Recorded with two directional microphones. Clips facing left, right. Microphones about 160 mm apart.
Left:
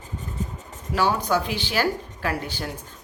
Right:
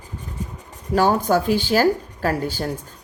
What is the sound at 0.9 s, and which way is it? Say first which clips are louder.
Speech: right 5 dB; 45° right (ahead or behind).